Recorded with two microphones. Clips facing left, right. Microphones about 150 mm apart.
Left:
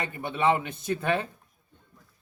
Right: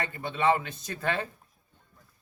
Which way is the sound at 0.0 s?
20° left (ahead or behind).